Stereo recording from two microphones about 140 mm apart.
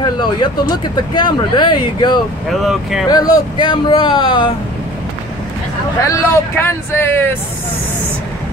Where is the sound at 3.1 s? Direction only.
30° left (ahead or behind).